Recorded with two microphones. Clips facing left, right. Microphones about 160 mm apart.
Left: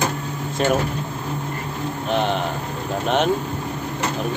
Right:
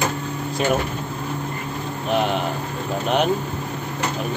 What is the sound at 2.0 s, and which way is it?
Speech, 5° right (ahead or behind).